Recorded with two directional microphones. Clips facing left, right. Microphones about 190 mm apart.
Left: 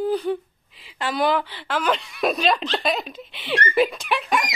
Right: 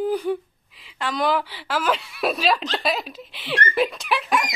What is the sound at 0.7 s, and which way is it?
A woman's voice, centre (ahead or behind).